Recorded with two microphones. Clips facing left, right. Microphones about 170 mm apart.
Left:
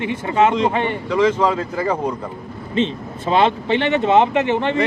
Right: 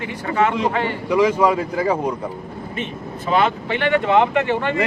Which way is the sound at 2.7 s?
25° left (ahead or behind).